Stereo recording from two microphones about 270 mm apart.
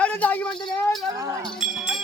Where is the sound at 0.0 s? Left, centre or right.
Centre.